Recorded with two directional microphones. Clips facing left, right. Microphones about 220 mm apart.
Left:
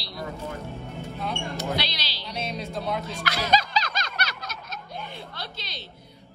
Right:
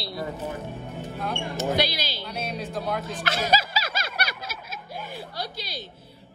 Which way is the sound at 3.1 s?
25° right (ahead or behind).